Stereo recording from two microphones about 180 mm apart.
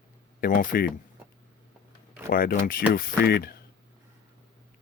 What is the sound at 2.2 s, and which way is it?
Speech, 50° left (ahead or behind).